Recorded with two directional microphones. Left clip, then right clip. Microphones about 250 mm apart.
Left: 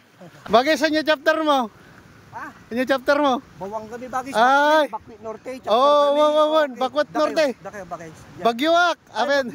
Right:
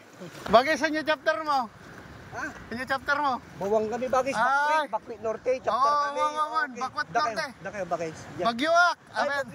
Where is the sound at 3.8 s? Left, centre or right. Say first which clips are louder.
Right 2 dB; left.